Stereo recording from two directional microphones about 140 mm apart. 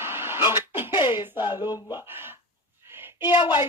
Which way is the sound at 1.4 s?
30° left (ahead or behind).